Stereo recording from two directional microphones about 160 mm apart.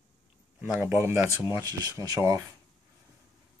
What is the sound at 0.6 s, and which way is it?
Speech, 15° right (ahead or behind).